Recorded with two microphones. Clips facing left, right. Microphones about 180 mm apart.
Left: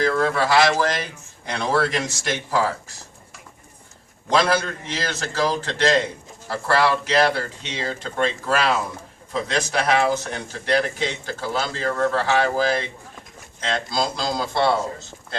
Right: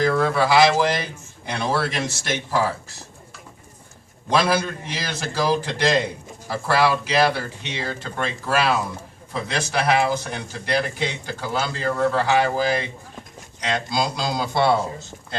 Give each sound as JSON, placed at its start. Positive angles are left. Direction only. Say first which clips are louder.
{"t": 0.0, "sound": "speech", "louder": "right 1 dB", "side_deg": -15}
{"t": 2.0, "sound": "speech", "louder": "even", "side_deg": -25}
{"t": 4.3, "sound": "speech", "louder": "even", "side_deg": -10}